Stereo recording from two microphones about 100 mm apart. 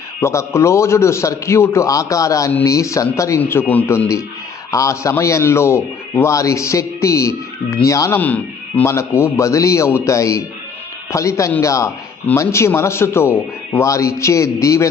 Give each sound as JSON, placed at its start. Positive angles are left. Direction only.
{"t": 0.2, "sound": "a man's voice", "side_deg": 25}
{"t": 8.1, "sound": "speech", "side_deg": 15}
{"t": 8.9, "sound": "a man's voice", "side_deg": 25}